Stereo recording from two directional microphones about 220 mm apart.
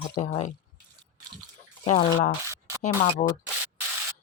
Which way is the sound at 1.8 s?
25° left (ahead or behind).